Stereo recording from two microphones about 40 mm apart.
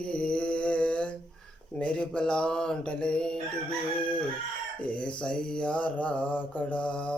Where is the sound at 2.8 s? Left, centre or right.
Left.